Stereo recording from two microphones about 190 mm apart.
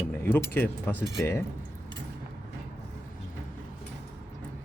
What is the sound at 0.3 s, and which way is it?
Speech, 10° left (ahead or behind).